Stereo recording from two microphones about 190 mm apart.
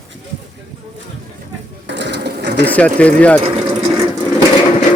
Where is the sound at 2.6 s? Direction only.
10° left (ahead or behind).